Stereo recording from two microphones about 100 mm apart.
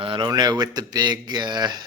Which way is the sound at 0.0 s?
55° right (ahead or behind).